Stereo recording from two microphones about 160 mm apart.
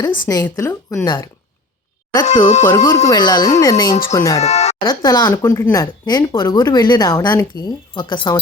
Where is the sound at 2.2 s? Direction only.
45° left (ahead or behind).